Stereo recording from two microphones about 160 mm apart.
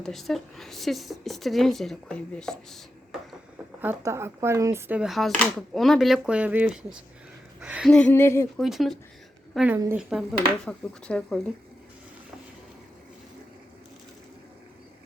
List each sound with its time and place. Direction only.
0.0 s speech: centre (ahead or behind)
3.8 s speech: 15° right (ahead or behind)
4.9 s speech: centre (ahead or behind)
7.9 s a sound: 10° left (ahead or behind)
8.5 s speech: centre (ahead or behind)